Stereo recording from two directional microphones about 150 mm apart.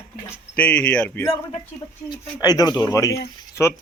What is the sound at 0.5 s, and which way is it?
Speech, 10° left (ahead or behind).